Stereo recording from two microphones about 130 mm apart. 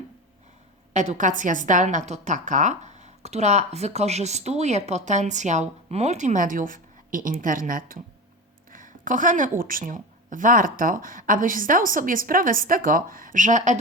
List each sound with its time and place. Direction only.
0.9 s a woman's voice: 70° right (ahead or behind)